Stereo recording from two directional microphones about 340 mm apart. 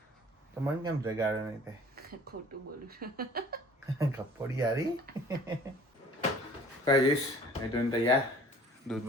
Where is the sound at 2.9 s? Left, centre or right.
Right.